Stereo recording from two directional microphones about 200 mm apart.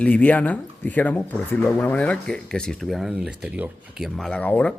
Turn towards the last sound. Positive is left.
turn(degrees=5)  # may be behind; listen again after turning